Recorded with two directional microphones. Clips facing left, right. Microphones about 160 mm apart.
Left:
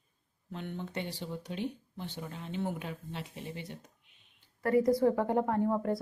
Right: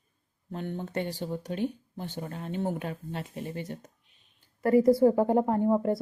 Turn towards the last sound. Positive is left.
turn(degrees=-25)  # may be behind; listen again after turning